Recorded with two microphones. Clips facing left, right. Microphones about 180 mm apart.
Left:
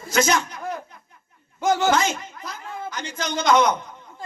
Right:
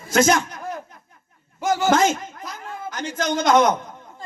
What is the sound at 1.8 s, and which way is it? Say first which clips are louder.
A man's voice: right 3 dB; 45° right (ahead or behind).